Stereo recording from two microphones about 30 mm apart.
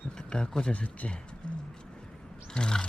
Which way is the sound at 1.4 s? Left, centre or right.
Left.